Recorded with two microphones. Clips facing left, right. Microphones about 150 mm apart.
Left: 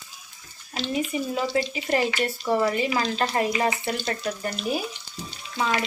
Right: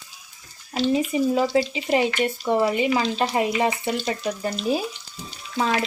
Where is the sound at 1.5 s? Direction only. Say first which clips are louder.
Right 3 dB; 15° right (ahead or behind).